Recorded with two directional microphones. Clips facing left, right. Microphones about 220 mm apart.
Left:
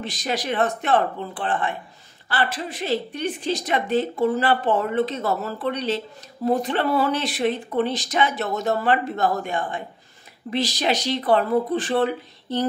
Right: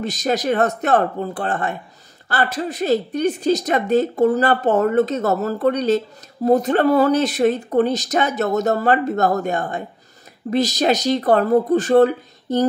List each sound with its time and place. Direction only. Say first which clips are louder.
0.0 s speech: right 6 dB; 40° right (ahead or behind)